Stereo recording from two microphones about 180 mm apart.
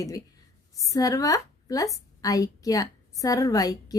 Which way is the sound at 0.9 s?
20° left (ahead or behind).